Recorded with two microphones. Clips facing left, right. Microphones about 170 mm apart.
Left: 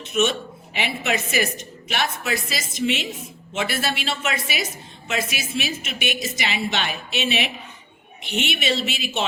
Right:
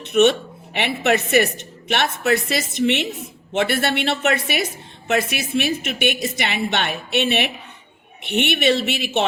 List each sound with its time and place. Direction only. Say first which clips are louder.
0.0 s speech: right 6 dB; 65° right (ahead or behind)